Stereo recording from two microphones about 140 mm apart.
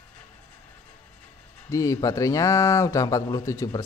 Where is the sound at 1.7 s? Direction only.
25° left (ahead or behind).